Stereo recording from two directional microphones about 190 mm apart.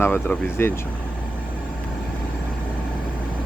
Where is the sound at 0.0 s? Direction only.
10° left (ahead or behind).